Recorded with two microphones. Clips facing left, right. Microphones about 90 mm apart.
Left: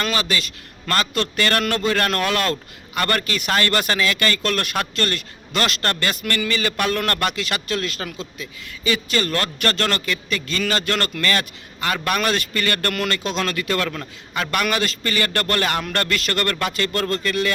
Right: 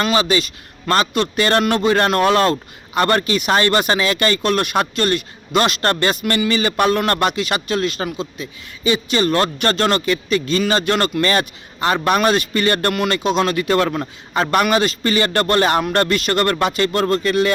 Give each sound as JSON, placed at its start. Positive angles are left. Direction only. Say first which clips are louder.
{"t": 0.0, "sound": "a man's voice", "louder": "right 6 dB", "side_deg": -20}